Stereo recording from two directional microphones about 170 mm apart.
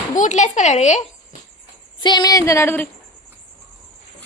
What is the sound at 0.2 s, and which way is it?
Speech, 45° left (ahead or behind).